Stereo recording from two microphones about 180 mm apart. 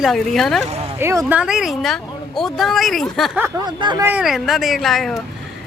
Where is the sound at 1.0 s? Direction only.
15° right (ahead or behind).